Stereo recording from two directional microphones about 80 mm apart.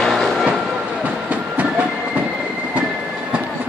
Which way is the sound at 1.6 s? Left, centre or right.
Centre.